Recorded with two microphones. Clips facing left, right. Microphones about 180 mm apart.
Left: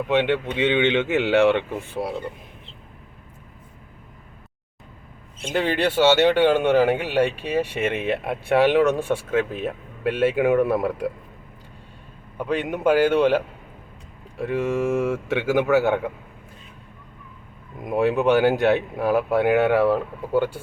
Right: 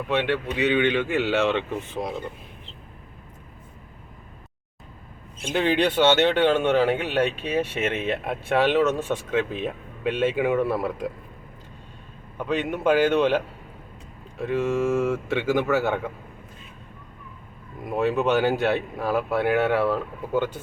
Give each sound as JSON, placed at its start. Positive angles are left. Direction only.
{"t": 0.1, "sound": "speech", "side_deg": 20}
{"t": 5.5, "sound": "speech", "side_deg": 5}
{"t": 12.4, "sound": "speech", "side_deg": 10}
{"t": 17.8, "sound": "speech", "side_deg": 15}